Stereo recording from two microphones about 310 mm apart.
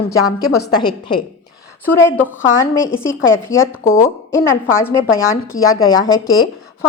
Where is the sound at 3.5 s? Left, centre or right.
Centre.